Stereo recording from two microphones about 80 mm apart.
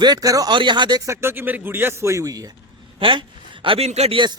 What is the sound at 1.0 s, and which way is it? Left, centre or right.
A man's voice, right.